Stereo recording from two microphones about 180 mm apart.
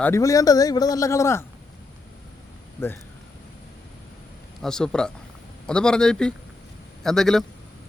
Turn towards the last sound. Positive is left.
turn(degrees=0)  # may be behind; listen again after turning